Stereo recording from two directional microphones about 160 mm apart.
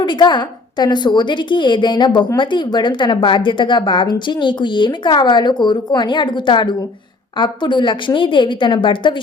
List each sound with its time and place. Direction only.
0.0 s a woman's voice: 30° left (ahead or behind)